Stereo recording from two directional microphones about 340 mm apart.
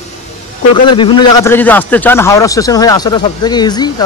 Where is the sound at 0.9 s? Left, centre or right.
Centre.